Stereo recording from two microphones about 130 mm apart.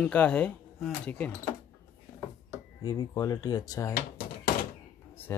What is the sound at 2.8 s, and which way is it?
Speech, 30° left (ahead or behind).